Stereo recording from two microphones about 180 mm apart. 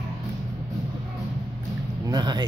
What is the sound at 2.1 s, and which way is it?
Speech, 25° right (ahead or behind).